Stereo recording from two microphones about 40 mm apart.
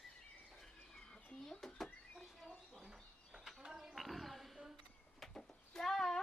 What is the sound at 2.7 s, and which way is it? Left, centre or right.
Bird, centre.